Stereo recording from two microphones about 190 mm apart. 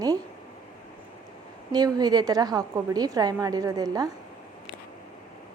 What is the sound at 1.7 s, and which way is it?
A woman's voice, 20° right (ahead or behind).